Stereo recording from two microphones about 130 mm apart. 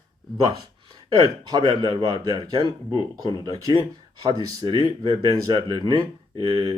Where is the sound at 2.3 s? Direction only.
30° right (ahead or behind).